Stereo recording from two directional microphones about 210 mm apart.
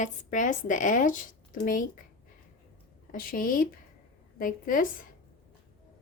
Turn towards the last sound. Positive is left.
turn(degrees=40)  # may be behind; listen again after turning